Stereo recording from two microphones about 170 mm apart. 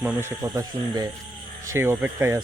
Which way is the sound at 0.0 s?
15° right (ahead or behind).